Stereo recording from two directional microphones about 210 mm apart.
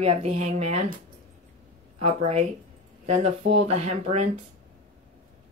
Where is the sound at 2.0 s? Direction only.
30° right (ahead or behind).